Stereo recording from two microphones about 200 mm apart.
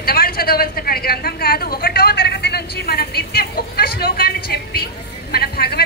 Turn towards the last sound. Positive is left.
turn(degrees=50)  # may be behind; listen again after turning